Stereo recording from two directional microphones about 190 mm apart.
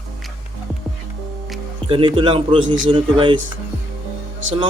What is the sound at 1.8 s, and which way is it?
A man's voice, 25° right (ahead or behind).